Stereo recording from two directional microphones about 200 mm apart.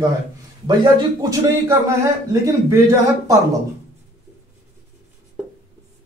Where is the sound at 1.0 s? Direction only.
20° right (ahead or behind).